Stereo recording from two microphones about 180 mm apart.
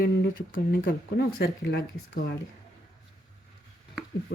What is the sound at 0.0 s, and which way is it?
Speech, 50° left (ahead or behind).